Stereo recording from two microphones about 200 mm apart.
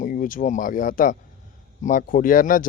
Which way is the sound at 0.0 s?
40° left (ahead or behind).